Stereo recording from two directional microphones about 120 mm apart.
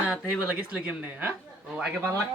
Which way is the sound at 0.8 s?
15° right (ahead or behind).